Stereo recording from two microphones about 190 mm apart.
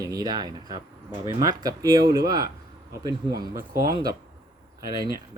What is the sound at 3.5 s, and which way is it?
Speech, 50° right (ahead or behind).